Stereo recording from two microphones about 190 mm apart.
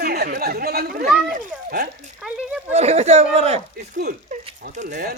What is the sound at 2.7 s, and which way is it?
Speech, 35° right (ahead or behind).